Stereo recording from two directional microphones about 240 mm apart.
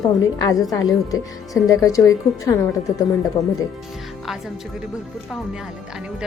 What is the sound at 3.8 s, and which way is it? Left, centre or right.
A woman's voice, centre.